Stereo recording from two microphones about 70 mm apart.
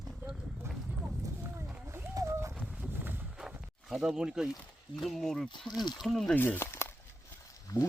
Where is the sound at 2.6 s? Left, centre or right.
Centre.